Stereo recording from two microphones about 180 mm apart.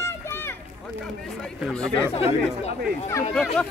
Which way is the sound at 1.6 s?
Centre (ahead or behind).